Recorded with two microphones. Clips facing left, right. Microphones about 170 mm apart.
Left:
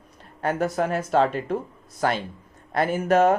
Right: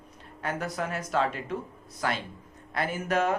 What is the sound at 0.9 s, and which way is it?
Speech, 30° left (ahead or behind).